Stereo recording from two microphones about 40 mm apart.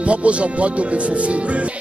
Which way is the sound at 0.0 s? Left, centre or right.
Right.